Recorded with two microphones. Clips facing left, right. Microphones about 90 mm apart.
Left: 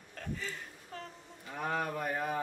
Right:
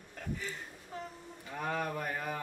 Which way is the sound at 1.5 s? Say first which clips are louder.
Left 1 dB; 5° left (ahead or behind).